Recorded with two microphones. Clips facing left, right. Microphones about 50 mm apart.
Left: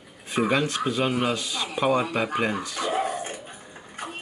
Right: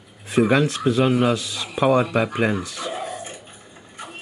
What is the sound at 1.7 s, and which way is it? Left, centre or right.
Speech, centre.